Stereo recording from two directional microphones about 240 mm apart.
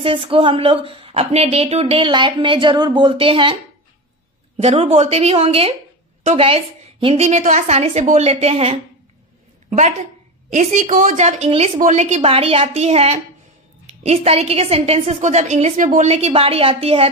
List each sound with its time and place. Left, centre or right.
0.0 s a woman's voice: right
4.6 s a woman's voice: right